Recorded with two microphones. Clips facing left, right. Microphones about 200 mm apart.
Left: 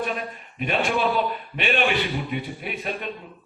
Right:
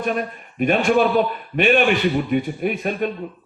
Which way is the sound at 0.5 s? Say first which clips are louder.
Right 7 dB; 50° right (ahead or behind).